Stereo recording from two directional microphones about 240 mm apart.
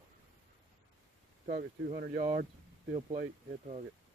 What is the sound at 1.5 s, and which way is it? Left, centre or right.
Speech, right.